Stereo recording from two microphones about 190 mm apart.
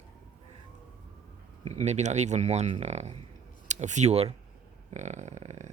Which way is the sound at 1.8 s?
35° right (ahead or behind).